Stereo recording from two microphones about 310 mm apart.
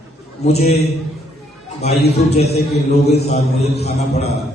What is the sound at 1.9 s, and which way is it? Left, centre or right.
Speech, left.